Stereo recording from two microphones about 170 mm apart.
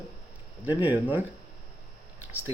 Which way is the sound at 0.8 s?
10° right (ahead or behind).